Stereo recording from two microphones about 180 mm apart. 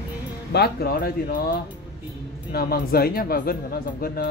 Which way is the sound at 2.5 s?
60° left (ahead or behind).